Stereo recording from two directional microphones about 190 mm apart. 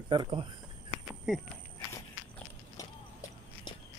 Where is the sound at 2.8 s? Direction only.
15° left (ahead or behind).